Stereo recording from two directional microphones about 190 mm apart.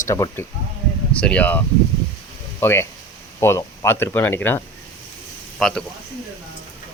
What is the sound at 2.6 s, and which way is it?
Speech, 15° left (ahead or behind).